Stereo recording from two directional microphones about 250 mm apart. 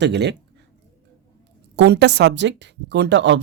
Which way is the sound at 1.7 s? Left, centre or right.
Right.